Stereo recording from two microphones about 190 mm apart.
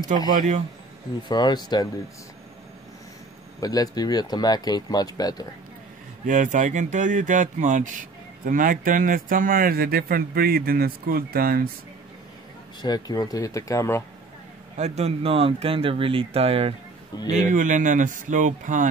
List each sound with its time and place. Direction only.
0.3 s speech: 40° right (ahead or behind)
1.3 s speech: 20° left (ahead or behind)
3.6 s speech: 20° left (ahead or behind)
6.2 s speech: 40° right (ahead or behind)
12.8 s speech: 20° left (ahead or behind)
14.8 s speech: 35° right (ahead or behind)
17.1 s speech: 20° left (ahead or behind)
17.5 s speech: 45° right (ahead or behind)